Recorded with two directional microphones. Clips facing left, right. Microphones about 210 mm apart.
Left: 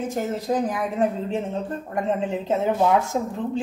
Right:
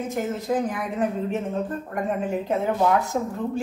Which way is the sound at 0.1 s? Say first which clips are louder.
Right 1 dB; 35° left (ahead or behind).